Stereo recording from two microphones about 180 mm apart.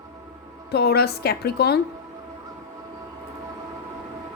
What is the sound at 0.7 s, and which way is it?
A woman's voice, 65° left (ahead or behind).